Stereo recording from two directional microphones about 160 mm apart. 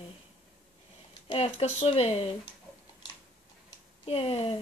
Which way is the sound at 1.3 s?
40° left (ahead or behind).